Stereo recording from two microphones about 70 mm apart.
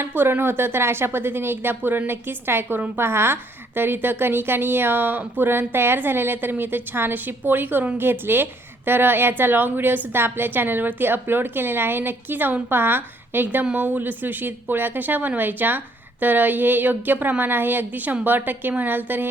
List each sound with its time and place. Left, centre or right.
0.0 s a woman's voice: right